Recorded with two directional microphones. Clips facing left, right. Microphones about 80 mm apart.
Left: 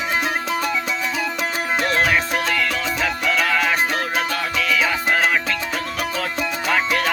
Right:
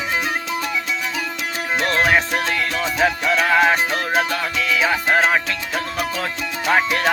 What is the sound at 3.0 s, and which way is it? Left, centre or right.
Music, right.